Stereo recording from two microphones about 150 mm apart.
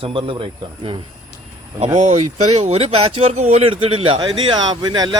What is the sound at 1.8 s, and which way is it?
Speech, 50° right (ahead or behind).